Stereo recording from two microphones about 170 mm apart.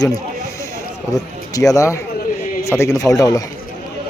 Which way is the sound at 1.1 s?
20° left (ahead or behind).